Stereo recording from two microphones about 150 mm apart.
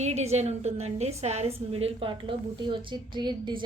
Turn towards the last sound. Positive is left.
turn(degrees=-30)  # may be behind; listen again after turning